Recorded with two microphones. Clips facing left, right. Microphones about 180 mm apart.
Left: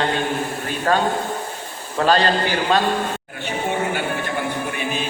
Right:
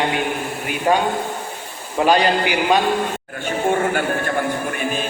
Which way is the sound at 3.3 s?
50° right (ahead or behind).